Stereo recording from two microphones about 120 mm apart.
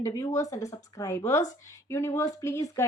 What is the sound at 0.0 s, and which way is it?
Speech, 25° left (ahead or behind).